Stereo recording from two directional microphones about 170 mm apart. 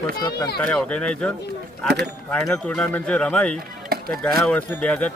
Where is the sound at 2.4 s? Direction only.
10° left (ahead or behind).